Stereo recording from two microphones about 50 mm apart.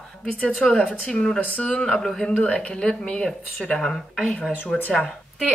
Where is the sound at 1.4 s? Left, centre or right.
Left.